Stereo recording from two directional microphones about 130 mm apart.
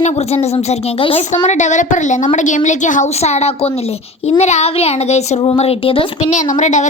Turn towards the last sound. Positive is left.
turn(degrees=65)  # may be behind; listen again after turning